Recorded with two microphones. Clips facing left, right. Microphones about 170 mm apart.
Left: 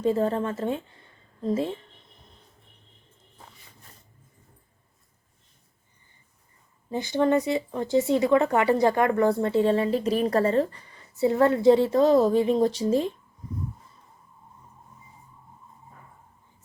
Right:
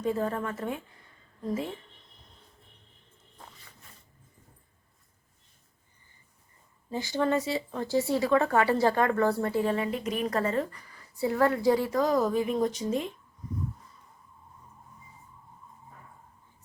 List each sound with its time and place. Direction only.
0.0 s speech: 30° left (ahead or behind)
6.9 s speech: 20° left (ahead or behind)